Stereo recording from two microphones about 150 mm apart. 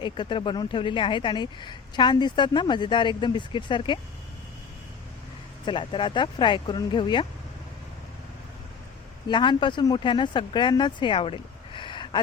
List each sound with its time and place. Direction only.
0.0 s speech: 30° left (ahead or behind)
5.6 s speech: 35° left (ahead or behind)
9.3 s speech: 30° left (ahead or behind)